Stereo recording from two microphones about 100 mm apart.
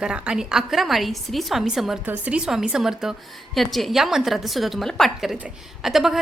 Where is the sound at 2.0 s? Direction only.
15° right (ahead or behind).